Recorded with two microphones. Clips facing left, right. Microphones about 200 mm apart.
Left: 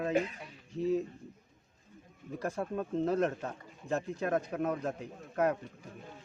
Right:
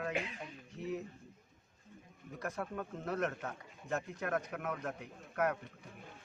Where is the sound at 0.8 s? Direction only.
30° left (ahead or behind).